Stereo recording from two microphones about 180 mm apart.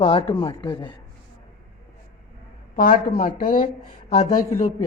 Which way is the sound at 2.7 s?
50° left (ahead or behind).